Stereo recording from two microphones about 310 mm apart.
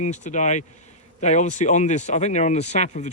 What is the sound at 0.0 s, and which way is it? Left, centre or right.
Speech, left.